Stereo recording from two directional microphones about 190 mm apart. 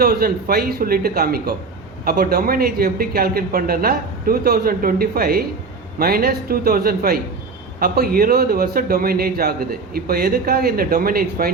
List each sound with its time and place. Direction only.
0.0 s speech: 50° right (ahead or behind)